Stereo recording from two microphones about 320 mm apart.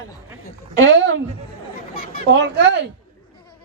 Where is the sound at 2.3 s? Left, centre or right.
Right.